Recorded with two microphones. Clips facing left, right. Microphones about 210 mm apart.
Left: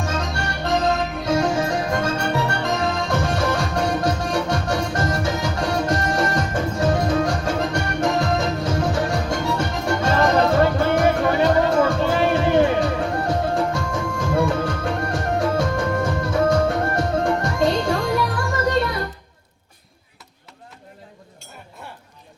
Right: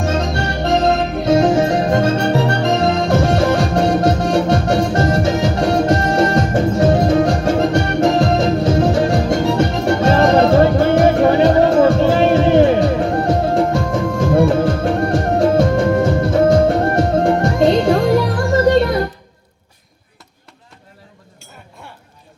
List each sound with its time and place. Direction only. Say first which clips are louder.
0.0 s music: right 7 dB; 35° right (ahead or behind)